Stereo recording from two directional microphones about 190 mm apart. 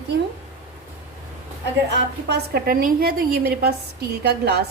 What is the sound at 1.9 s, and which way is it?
A woman's voice, 60° right (ahead or behind).